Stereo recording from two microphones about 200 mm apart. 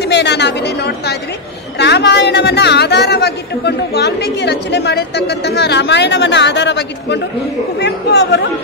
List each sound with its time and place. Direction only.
0.0 s a woman's voice: 60° left (ahead or behind)